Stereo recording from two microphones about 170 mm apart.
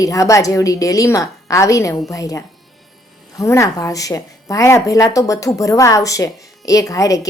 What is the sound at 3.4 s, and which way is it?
Speech, 15° left (ahead or behind).